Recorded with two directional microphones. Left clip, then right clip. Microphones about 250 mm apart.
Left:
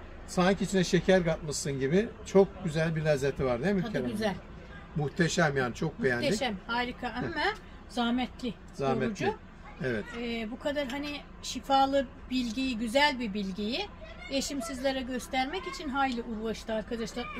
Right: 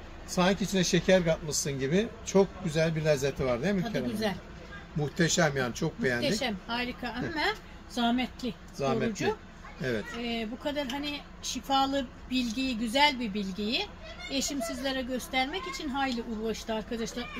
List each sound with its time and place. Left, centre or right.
0.3 s speech: centre
5.1 s speech: centre
6.2 s speech: centre
8.7 s speech: centre
10.2 s speech: centre